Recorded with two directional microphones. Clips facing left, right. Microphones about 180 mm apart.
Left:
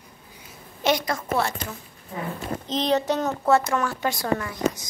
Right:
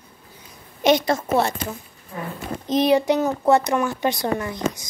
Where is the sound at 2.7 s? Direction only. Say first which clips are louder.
Right 6 dB; 10° right (ahead or behind).